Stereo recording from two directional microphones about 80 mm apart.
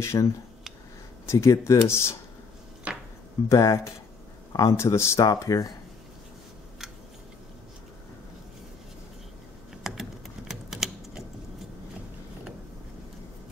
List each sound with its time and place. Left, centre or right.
0.0 s speech: left
2.9 s chopping: centre
3.4 s speech: left
4.5 s speech: left
4.7 s speech: left
9.8 s typing: centre